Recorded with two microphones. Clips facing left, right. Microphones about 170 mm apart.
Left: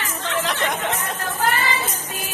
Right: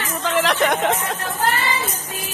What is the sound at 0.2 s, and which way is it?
Chatter, 80° right.